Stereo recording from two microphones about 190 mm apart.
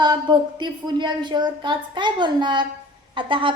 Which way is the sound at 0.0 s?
25° right (ahead or behind).